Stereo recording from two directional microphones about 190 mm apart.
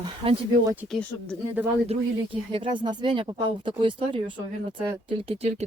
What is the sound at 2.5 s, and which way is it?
Speech, 25° right (ahead or behind).